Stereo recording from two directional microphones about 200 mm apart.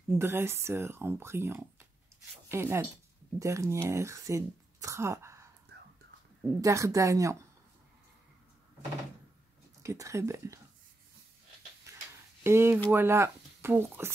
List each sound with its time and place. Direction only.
0.1 s speech: 10° right (ahead or behind)
9.8 s speech: 15° right (ahead or behind)
11.9 s tick-tock: 15° right (ahead or behind)
12.4 s speech: 10° right (ahead or behind)